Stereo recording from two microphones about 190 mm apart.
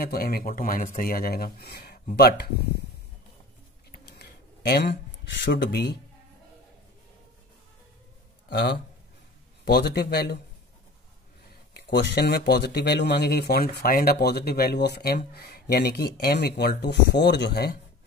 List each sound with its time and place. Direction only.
0.0 s speech: 55° left (ahead or behind)
3.9 s a sound: 60° left (ahead or behind)
5.4 s speech: 60° left (ahead or behind)
8.5 s a man's voice: 60° left (ahead or behind)
11.7 s speech: 60° left (ahead or behind)